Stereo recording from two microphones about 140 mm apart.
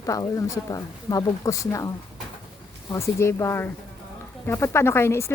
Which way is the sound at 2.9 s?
20° left (ahead or behind).